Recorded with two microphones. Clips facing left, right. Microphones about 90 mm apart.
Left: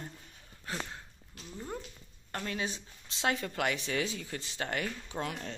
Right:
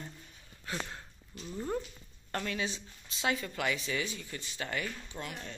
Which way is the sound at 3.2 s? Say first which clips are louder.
Left 1 dB; 55° left (ahead or behind).